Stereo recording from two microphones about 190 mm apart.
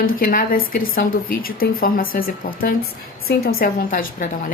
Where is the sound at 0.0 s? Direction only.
50° left (ahead or behind).